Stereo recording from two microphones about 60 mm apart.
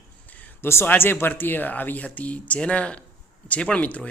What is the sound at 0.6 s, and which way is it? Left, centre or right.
Speech, left.